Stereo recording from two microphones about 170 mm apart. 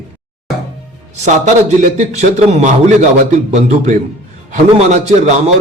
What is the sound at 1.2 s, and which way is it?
A man's voice, 45° right (ahead or behind).